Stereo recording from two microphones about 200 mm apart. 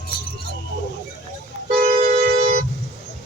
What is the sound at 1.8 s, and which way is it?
Vehicle, 40° right (ahead or behind).